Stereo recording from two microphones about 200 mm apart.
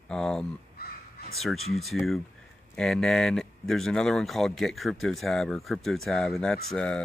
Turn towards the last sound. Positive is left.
turn(degrees=5)  # may be behind; listen again after turning